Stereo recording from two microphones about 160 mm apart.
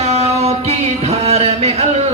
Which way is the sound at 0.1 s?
40° right (ahead or behind).